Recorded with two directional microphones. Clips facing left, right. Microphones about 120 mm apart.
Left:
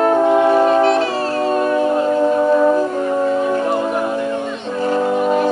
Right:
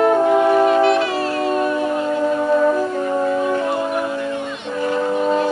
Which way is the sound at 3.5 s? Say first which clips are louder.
Left 2 dB; 30° left (ahead or behind).